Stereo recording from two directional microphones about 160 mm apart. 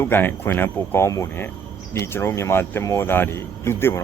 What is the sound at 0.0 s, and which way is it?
Speech, 15° left (ahead or behind).